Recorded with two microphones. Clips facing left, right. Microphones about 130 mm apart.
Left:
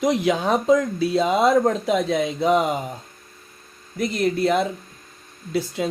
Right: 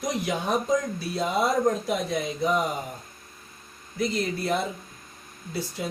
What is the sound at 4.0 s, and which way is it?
Speech, 65° left (ahead or behind).